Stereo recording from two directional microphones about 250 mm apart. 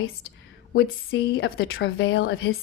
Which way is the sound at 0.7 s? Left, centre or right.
Left.